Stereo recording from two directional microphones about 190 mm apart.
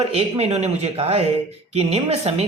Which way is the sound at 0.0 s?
30° right (ahead or behind).